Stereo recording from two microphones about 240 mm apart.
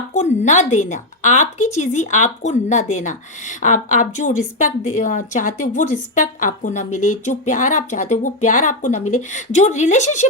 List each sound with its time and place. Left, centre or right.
0.1 s a woman's voice: left